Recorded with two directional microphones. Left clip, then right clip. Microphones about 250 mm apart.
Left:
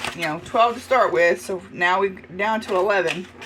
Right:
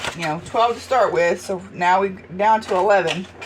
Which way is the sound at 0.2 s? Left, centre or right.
Left.